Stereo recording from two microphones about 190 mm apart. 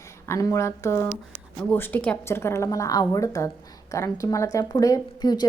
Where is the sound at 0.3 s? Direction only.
15° left (ahead or behind).